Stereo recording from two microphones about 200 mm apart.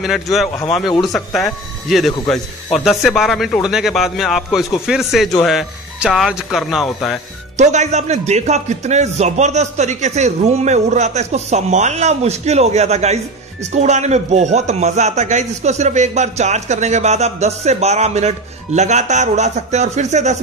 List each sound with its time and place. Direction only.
0.0 s speech: centre (ahead or behind)
7.5 s speech: 35° right (ahead or behind)